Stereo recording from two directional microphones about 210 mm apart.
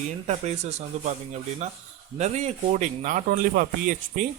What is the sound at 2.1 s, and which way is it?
A man's voice, 30° right (ahead or behind).